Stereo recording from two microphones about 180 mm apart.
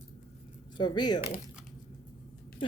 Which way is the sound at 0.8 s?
25° left (ahead or behind).